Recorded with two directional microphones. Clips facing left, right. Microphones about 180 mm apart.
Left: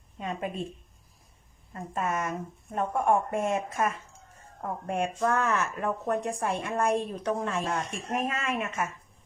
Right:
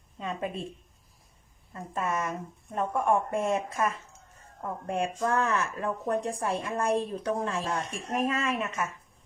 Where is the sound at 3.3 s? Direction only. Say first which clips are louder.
Even; 30° right (ahead or behind).